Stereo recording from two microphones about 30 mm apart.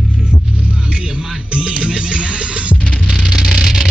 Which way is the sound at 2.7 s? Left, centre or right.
Left.